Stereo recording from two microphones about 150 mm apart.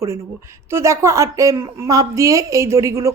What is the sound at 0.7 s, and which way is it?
A woman's voice, 20° right (ahead or behind).